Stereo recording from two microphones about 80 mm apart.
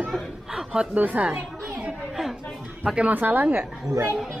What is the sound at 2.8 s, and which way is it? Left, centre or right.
Speech, centre.